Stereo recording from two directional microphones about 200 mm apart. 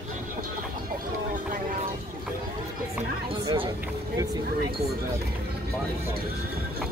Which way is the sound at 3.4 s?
25° right (ahead or behind).